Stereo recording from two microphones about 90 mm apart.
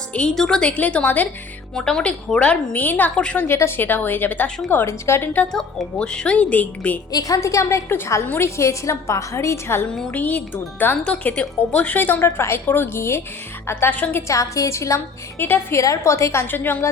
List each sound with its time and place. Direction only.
0.1 s a woman's voice: 10° left (ahead or behind)
1.7 s a woman's voice: 5° left (ahead or behind)
3.4 s speech: 25° left (ahead or behind)
5.5 s a woman's voice: 10° left (ahead or behind)
7.1 s a woman's voice: 40° left (ahead or behind)
10.1 s a woman's voice: 15° left (ahead or behind)